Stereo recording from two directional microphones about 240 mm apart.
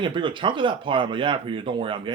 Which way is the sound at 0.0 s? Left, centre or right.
Right.